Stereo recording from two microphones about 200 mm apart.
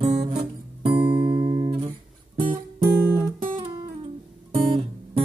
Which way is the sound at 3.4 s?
25° right (ahead or behind).